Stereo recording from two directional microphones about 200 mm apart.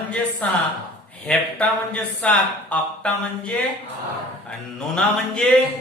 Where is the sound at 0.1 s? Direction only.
5° left (ahead or behind).